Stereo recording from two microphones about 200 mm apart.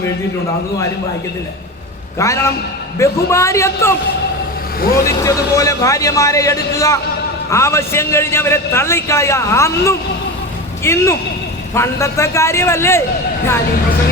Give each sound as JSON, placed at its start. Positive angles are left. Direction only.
{"t": 2.1, "sound": "a man's voice", "side_deg": 15}
{"t": 4.8, "sound": "speech", "side_deg": 50}
{"t": 5.0, "sound": "a man's voice", "side_deg": 15}